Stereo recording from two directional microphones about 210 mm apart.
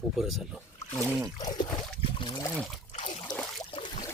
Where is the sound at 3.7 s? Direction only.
25° left (ahead or behind).